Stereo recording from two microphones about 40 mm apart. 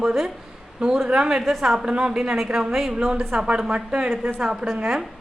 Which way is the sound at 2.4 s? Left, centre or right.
Centre.